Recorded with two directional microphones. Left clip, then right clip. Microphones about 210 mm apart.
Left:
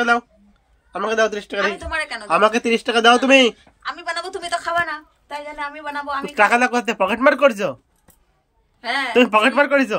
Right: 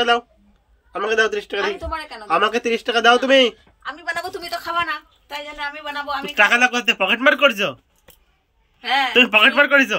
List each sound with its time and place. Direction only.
0.9 s speech: 30° left (ahead or behind)
3.8 s a woman's voice: 10° right (ahead or behind)
4.5 s a woman's voice: 5° left (ahead or behind)
8.8 s a woman's voice: 10° left (ahead or behind)